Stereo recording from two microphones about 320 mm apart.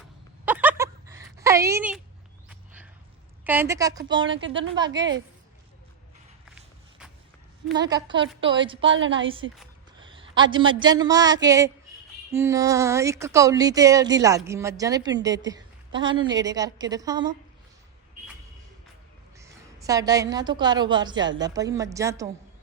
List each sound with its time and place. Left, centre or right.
0.4 s a sound: centre
3.4 s speech: centre
7.8 s speech: centre
8.8 s a woman's voice: right
10.0 s a sound: centre
10.5 s speech: centre
19.4 s speech: centre